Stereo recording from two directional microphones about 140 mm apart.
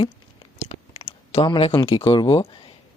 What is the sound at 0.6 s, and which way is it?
Clicking, 50° left (ahead or behind).